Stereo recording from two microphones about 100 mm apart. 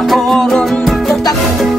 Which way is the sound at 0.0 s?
Centre (ahead or behind).